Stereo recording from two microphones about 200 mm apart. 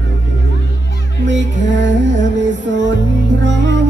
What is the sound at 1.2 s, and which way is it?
Music, 65° right (ahead or behind).